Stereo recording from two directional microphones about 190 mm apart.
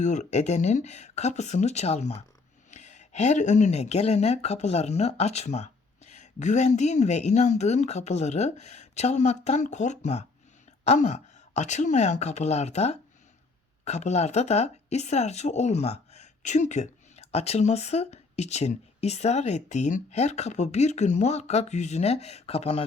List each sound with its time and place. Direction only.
0.0 s speech: 40° left (ahead or behind)